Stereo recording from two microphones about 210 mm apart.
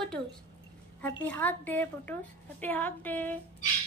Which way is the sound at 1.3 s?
10° left (ahead or behind).